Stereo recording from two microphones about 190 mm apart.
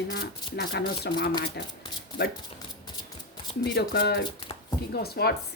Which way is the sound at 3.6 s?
60° left (ahead or behind).